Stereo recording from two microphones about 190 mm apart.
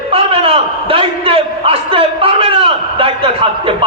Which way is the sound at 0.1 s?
30° right (ahead or behind).